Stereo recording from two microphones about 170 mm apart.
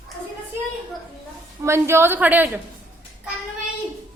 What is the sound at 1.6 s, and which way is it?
Speech, 15° right (ahead or behind).